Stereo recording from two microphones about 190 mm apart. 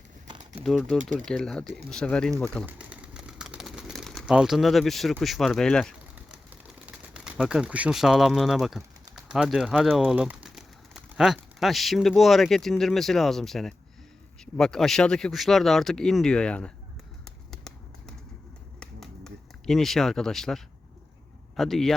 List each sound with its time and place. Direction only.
0.3 s crumpling: 25° right (ahead or behind)
0.6 s speech: centre (ahead or behind)
2.6 s pigeon: 5° right (ahead or behind)
6.8 s speech: 5° right (ahead or behind)
17.2 s a sound: centre (ahead or behind)
21.5 s speech: centre (ahead or behind)